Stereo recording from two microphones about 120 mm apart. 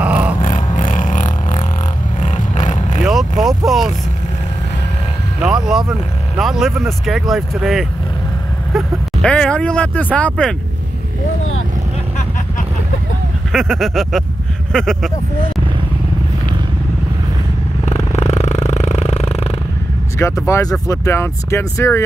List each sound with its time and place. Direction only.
0.0 s a sound: 15° right (ahead or behind)
0.4 s music: 90° left
2.2 s vehicle: 90° left
3.1 s vehicle: centre (ahead or behind)
5.4 s speech: 5° right (ahead or behind)
13.5 s speech: centre (ahead or behind)
18.1 s a sound: 70° left (ahead or behind)
20.2 s speech: 25° left (ahead or behind)